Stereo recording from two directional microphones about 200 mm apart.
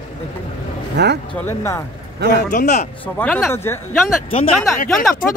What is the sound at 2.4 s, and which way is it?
Speech, 40° left (ahead or behind).